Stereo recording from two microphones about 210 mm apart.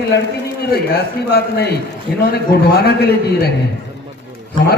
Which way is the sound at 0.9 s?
50° left (ahead or behind).